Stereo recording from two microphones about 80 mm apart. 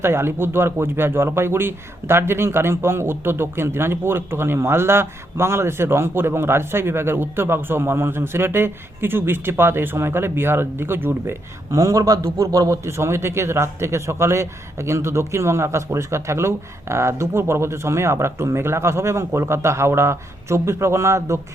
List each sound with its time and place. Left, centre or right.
0.0 s speech: right
11.7 s speech: right